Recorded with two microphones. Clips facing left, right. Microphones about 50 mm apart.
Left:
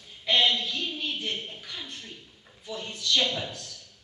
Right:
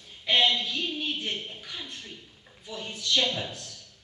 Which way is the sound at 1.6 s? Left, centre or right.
Centre.